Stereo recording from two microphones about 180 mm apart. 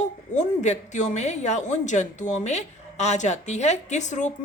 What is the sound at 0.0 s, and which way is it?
A woman's voice, 40° left (ahead or behind).